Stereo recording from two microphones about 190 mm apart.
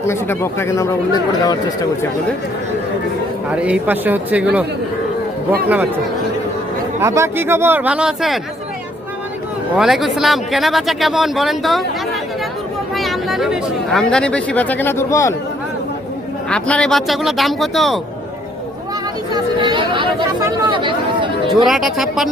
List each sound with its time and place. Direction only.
0.1 s speech: 15° left (ahead or behind)
3.5 s speech: 5° right (ahead or behind)
5.6 s speech: 10° right (ahead or behind)
7.0 s speech: 15° right (ahead or behind)
9.7 s speech: centre (ahead or behind)
12.9 s speech: centre (ahead or behind)
16.5 s speech: 5° left (ahead or behind)
19.3 s chatter: 25° right (ahead or behind)
20.4 s speech: 25° right (ahead or behind)
21.7 s speech: centre (ahead or behind)